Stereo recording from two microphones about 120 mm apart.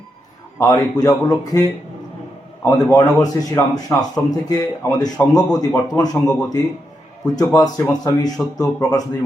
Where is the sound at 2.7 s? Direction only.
25° left (ahead or behind).